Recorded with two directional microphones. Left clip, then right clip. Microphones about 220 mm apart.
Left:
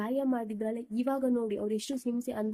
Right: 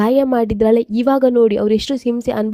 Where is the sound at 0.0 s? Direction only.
40° right (ahead or behind).